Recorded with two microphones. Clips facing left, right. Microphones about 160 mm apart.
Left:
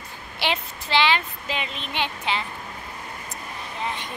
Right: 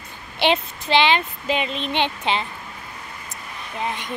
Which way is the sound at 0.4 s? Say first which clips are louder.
Right 7 dB; 20° right (ahead or behind).